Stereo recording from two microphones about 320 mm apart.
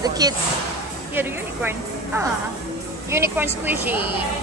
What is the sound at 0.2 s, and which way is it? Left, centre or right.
A woman's voice, centre.